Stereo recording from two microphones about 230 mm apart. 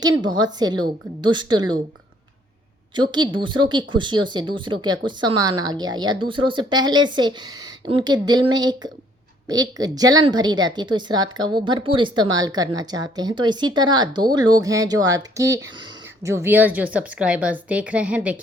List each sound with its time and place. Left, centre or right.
0.0 s a woman's voice: centre
2.9 s a woman's voice: centre